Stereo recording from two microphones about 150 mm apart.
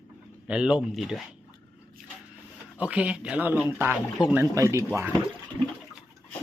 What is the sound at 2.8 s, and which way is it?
Speech, 10° right (ahead or behind).